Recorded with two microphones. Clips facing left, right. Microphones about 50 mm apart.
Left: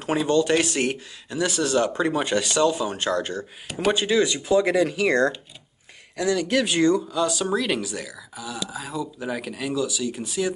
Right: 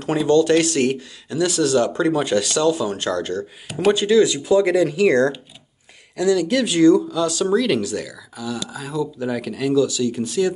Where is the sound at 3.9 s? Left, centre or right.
Centre.